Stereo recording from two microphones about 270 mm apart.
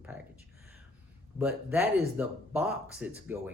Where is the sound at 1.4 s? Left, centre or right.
Centre.